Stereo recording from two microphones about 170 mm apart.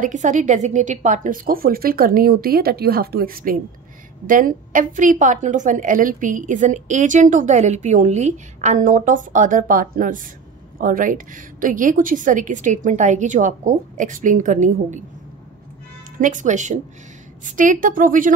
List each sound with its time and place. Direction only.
0.0 s a woman's voice: 50° right (ahead or behind)
16.2 s a woman's voice: 50° right (ahead or behind)